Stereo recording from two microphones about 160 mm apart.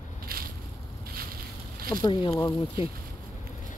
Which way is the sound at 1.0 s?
70° right (ahead or behind).